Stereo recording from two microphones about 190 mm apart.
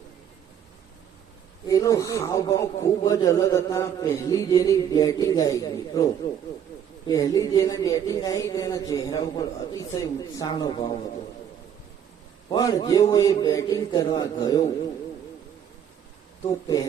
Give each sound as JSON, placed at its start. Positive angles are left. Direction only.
{"t": 1.6, "sound": "a man's voice", "side_deg": 15}
{"t": 7.1, "sound": "a man's voice", "side_deg": 20}
{"t": 12.5, "sound": "a man's voice", "side_deg": 20}